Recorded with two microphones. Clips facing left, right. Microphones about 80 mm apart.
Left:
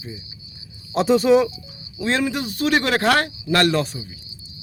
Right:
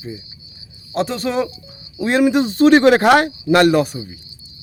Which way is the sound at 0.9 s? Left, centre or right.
Centre.